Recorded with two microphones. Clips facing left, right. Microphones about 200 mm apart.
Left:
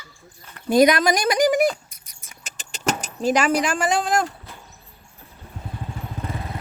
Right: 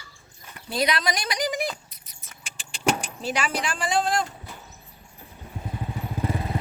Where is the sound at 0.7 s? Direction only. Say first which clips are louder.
Left 10 dB; 50° left (ahead or behind).